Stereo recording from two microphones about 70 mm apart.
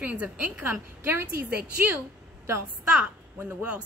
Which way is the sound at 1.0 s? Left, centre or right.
Right.